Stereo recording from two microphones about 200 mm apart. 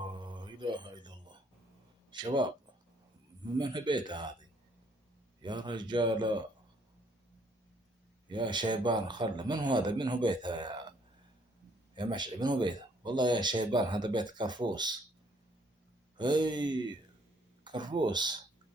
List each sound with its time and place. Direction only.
0.0 s music: 25° right (ahead or behind)
2.0 s speech: 25° right (ahead or behind)
5.4 s speech: 25° right (ahead or behind)
8.3 s speech: 25° right (ahead or behind)
11.9 s speech: 20° right (ahead or behind)
16.1 s speech: 20° right (ahead or behind)